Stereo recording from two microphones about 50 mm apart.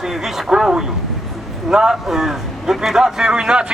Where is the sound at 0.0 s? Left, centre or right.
Centre.